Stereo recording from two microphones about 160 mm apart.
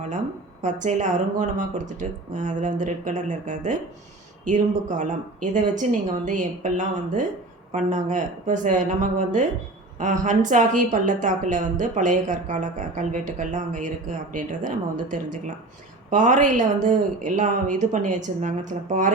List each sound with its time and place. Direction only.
0.6 s a woman's voice: 50° right (ahead or behind)